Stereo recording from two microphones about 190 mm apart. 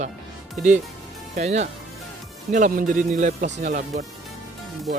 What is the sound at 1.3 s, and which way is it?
Speech, 35° right (ahead or behind).